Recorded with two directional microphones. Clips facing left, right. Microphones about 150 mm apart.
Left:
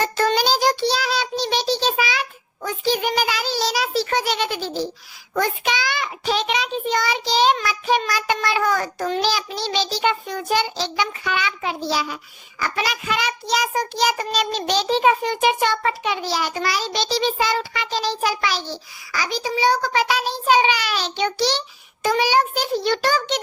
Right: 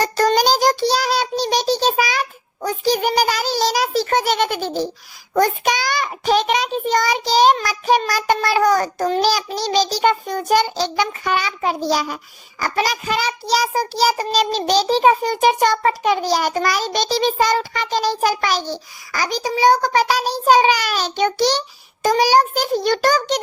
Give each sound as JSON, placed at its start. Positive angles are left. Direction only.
{"t": 0.0, "sound": "child singing", "side_deg": -40}
{"t": 22.0, "sound": "a child's voice", "side_deg": -40}